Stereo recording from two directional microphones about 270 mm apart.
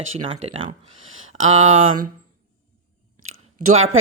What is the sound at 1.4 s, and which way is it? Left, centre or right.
Speech, right.